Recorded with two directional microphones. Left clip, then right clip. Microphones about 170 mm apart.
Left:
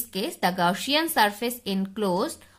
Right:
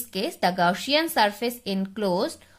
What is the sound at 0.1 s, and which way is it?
A woman's voice, 15° right (ahead or behind).